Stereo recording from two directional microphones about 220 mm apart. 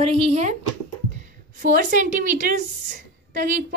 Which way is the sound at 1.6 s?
40° right (ahead or behind).